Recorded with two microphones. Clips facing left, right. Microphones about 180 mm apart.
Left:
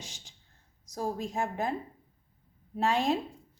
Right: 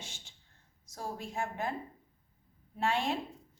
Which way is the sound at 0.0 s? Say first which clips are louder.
Left 1 dB; 40° left (ahead or behind).